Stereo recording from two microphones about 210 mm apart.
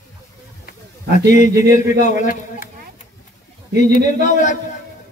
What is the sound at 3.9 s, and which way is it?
Speech, 35° left (ahead or behind).